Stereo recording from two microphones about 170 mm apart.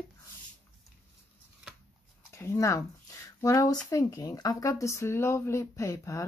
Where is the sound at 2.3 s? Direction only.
15° left (ahead or behind).